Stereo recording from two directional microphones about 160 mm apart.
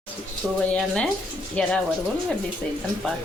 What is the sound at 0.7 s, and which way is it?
Speech, 5° left (ahead or behind).